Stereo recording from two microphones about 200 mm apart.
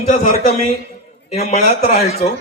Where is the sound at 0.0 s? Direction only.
35° left (ahead or behind).